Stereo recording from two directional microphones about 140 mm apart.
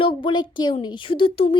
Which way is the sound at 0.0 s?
35° left (ahead or behind).